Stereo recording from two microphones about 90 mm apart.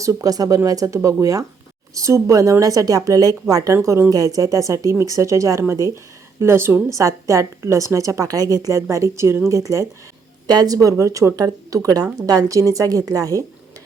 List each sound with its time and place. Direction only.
0.0 s a woman's voice: 40° right (ahead or behind)
3.8 s speech: 30° right (ahead or behind)
4.1 s a woman's voice: 40° right (ahead or behind)
10.4 s a woman's voice: 45° right (ahead or behind)